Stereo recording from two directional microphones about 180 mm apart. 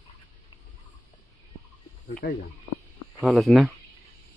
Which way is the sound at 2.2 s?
75° left (ahead or behind).